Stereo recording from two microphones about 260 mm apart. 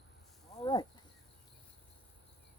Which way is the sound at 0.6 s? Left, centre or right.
Centre.